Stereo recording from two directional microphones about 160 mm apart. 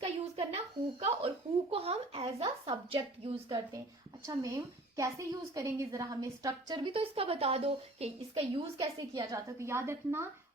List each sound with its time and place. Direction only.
0.0 s a sound: 40° right (ahead or behind)
1.7 s a woman's voice: 35° right (ahead or behind)
4.3 s a woman's voice: 20° right (ahead or behind)